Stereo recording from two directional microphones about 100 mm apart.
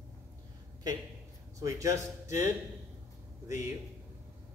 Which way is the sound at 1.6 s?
30° right (ahead or behind).